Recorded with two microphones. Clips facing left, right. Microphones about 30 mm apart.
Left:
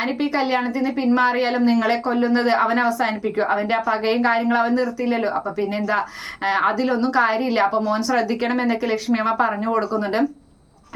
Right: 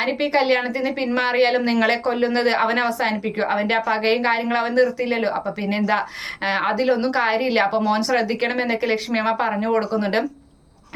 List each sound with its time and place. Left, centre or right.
0.0 s a woman's voice: right
3.0 s a woman's voice: right
3.5 s a woman's voice: right
7.4 s a woman's voice: right
8.1 s a woman's voice: right